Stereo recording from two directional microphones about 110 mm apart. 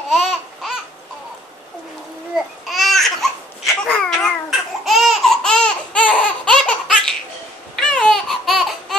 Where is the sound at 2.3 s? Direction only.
Centre (ahead or behind).